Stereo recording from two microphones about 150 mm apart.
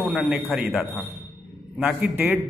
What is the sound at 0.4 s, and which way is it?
Speech, 10° right (ahead or behind).